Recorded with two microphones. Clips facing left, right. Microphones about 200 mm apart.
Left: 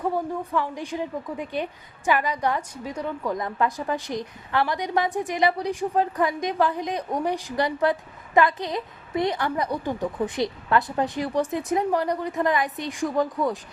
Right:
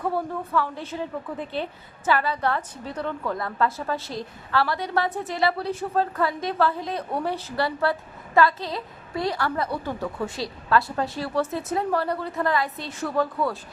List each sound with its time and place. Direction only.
0.0 s a woman's voice: 15° left (ahead or behind)